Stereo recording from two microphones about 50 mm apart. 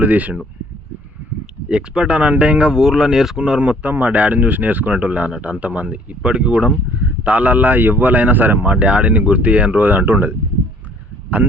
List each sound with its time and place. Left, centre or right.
0.0 s a man's voice: right
1.6 s speech: centre
2.7 s speech: centre
3.9 s a man's voice: right
7.3 s a man's voice: right